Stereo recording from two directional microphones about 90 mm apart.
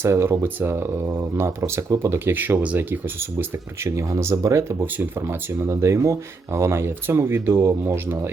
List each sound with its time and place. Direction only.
0.0 s speech: 30° right (ahead or behind)